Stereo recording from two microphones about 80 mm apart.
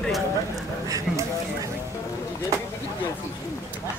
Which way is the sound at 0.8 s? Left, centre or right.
Right.